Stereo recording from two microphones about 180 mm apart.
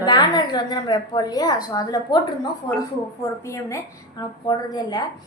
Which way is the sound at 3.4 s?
15° left (ahead or behind).